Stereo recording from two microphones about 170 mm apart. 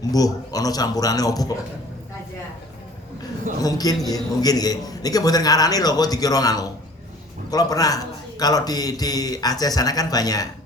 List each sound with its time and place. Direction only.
0.0 s a man's voice: 20° left (ahead or behind)
3.6 s a man's voice: 20° left (ahead or behind)